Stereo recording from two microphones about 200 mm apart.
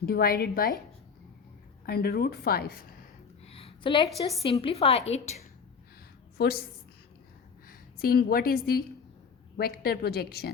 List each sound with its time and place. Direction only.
0.0 s a woman's voice: 50° left (ahead or behind)
1.9 s a woman's voice: 50° left (ahead or behind)
3.4 s a sound: 30° left (ahead or behind)
4.4 s a woman's voice: 25° left (ahead or behind)
6.3 s a woman's voice: 50° left (ahead or behind)
7.7 s a woman's voice: 50° left (ahead or behind)